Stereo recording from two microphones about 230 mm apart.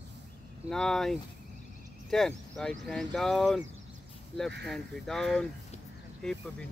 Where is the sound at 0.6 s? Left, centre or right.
Centre.